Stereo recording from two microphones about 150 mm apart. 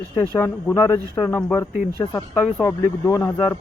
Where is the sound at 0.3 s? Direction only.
15° left (ahead or behind).